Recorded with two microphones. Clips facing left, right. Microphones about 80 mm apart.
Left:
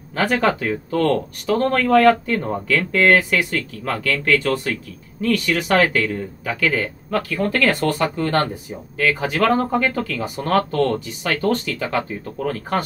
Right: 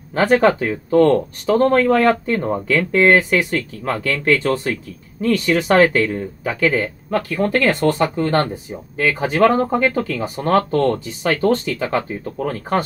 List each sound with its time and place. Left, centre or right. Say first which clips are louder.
0.1 s speech: right 5 dB; right